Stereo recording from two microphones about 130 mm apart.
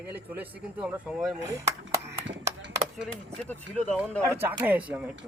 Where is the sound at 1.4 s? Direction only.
25° right (ahead or behind).